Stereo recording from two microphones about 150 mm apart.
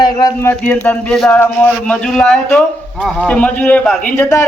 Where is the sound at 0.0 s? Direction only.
25° left (ahead or behind).